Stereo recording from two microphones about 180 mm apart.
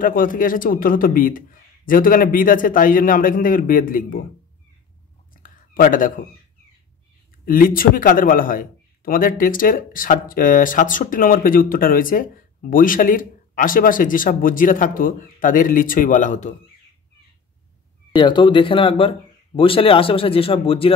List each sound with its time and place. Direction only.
0.0 s a man's voice: 50° left (ahead or behind)
5.4 s a sound: 50° left (ahead or behind)
7.4 s a man's voice: 50° left (ahead or behind)
18.1 s speech: 25° left (ahead or behind)